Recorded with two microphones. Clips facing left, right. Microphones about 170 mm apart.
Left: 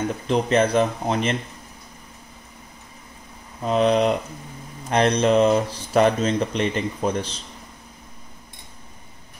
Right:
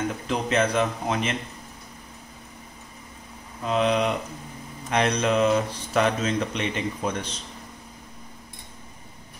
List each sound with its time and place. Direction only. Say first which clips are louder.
0.3 s speech: left 5 dB; 35° left (ahead or behind)
3.6 s speech: left 4 dB; 40° left (ahead or behind)